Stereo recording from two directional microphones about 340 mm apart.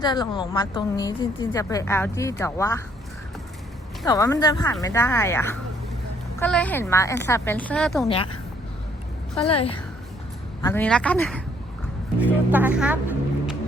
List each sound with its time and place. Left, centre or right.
0.0 s a woman's voice: centre
4.0 s a woman's voice: centre
8.0 s a woman's voice: centre
9.5 s a woman's voice: centre